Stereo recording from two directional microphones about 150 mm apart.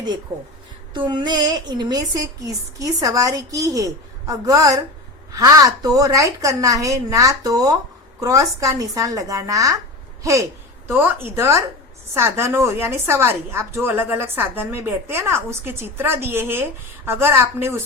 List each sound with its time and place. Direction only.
0.9 s a woman's voice: 30° right (ahead or behind)
10.8 s a woman's voice: 15° right (ahead or behind)